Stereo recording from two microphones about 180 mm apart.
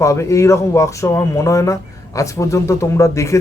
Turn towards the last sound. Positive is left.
turn(degrees=15)  # may be behind; listen again after turning